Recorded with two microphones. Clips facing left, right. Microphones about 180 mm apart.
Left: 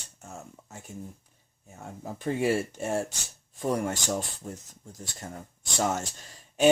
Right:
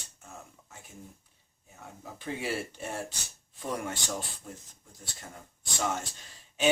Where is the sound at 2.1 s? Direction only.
45° left (ahead or behind).